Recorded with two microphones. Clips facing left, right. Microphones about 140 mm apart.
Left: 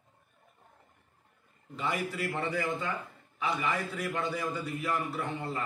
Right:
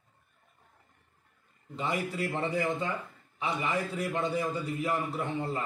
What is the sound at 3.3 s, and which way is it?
A man's voice, 30° right (ahead or behind).